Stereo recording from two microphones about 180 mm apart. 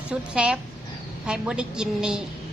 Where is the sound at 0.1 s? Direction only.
5° right (ahead or behind).